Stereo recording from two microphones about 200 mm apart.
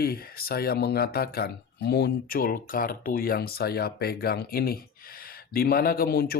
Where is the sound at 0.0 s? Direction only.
50° left (ahead or behind).